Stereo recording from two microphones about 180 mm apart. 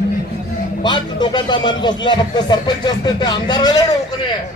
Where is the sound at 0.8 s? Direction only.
25° left (ahead or behind).